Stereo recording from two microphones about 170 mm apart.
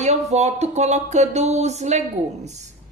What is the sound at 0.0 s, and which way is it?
Speech, 40° right (ahead or behind).